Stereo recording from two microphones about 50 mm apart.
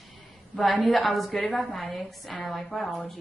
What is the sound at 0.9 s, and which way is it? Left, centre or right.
Speech, centre.